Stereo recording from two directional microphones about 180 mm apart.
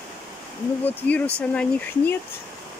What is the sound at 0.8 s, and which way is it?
Speech, 10° left (ahead or behind).